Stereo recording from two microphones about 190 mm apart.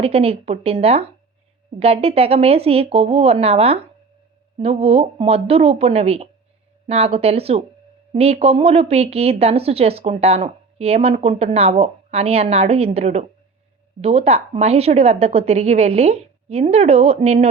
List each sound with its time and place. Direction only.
0.0 s speech: 30° right (ahead or behind)